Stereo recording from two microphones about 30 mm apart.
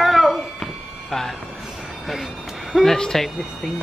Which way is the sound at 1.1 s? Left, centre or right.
Centre.